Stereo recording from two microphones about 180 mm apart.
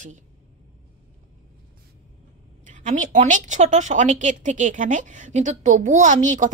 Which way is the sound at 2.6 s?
45° right (ahead or behind).